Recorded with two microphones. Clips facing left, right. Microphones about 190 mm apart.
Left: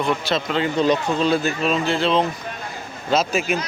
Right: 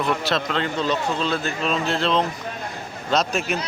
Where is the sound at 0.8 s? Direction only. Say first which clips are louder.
Left 7 dB; 15° left (ahead or behind).